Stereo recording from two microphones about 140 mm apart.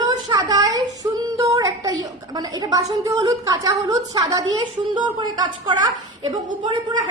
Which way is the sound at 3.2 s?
25° right (ahead or behind).